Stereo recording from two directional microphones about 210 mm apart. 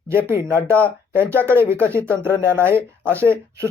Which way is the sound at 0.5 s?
10° right (ahead or behind).